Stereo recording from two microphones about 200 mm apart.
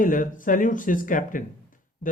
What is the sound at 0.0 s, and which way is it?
Speech, 40° left (ahead or behind).